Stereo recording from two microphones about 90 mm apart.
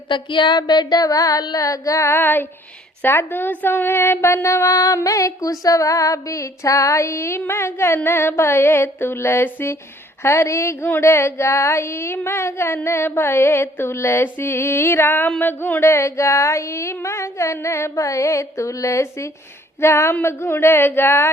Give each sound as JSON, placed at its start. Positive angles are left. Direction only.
{"t": 0.1, "sound": "female singing", "side_deg": 60}
{"t": 3.0, "sound": "speech", "side_deg": 25}
{"t": 10.2, "sound": "a sound", "side_deg": 30}
{"t": 10.8, "sound": "speech", "side_deg": 25}
{"t": 15.4, "sound": "a sound", "side_deg": 20}
{"t": 19.8, "sound": "speech", "side_deg": 30}